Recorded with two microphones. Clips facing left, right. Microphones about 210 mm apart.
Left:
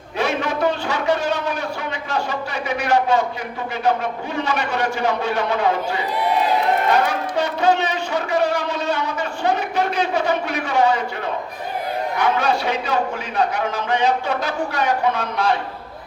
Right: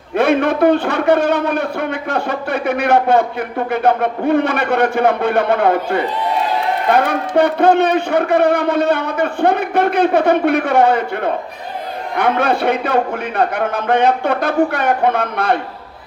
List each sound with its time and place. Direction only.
0.2 s a man's voice: 55° right (ahead or behind)